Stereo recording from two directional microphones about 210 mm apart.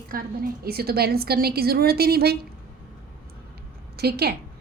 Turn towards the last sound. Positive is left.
turn(degrees=-50)  # may be behind; listen again after turning